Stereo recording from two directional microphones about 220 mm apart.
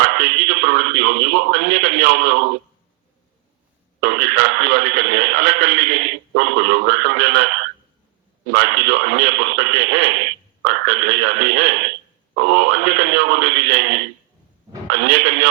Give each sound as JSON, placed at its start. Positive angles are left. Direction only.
{"t": 0.0, "sound": "a man's voice", "side_deg": -50}
{"t": 4.0, "sound": "speech", "side_deg": -50}